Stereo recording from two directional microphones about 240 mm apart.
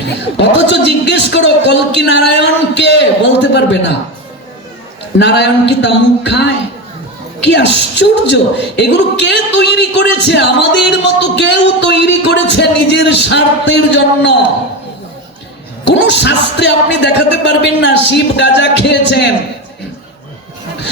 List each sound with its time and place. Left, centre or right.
0.3 s a woman's voice: left
2.3 s a sound: left
5.2 s a woman's voice: left
15.8 s a woman's voice: left